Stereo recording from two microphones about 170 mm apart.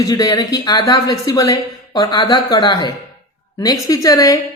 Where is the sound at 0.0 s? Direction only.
20° left (ahead or behind).